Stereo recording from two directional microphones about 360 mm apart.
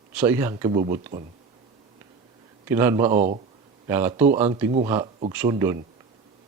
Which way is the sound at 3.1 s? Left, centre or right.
Centre.